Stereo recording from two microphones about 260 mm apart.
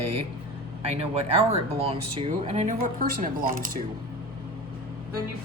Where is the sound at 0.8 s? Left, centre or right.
Right.